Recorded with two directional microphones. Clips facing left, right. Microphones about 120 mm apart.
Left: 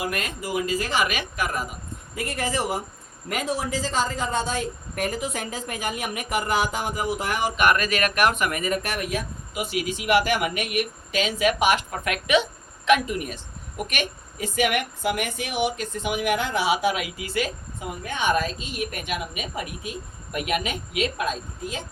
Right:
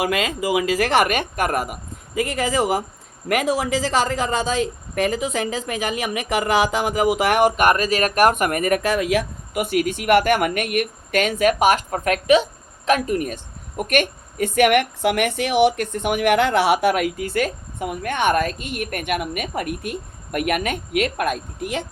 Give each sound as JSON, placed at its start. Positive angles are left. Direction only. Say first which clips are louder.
{"t": 0.0, "sound": "speech", "louder": "right 8 dB", "side_deg": -90}
{"t": 3.2, "sound": "speech", "louder": "right 7 dB", "side_deg": -85}
{"t": 7.5, "sound": "speech", "louder": "right 4 dB", "side_deg": -40}
{"t": 9.0, "sound": "a woman's voice", "louder": "right 8 dB", "side_deg": -75}